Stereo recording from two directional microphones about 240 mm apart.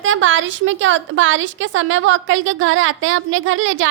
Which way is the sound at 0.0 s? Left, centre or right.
Right.